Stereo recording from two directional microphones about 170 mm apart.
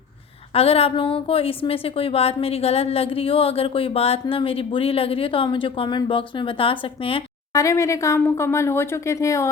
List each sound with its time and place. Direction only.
0.5 s a woman's voice: 35° left (ahead or behind)
7.5 s speech: 20° left (ahead or behind)